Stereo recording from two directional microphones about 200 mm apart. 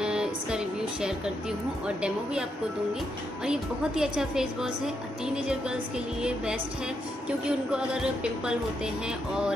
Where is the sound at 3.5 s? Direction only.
5° right (ahead or behind).